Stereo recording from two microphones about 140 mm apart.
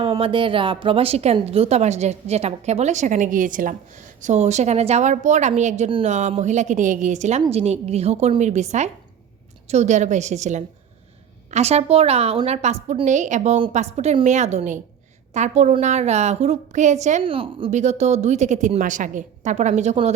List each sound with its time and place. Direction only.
0.2 s a woman's voice: 40° right (ahead or behind); by 17.2 s 60° right (ahead or behind)
17.2 s speech: 40° right (ahead or behind)
17.7 s a woman's voice: 55° right (ahead or behind)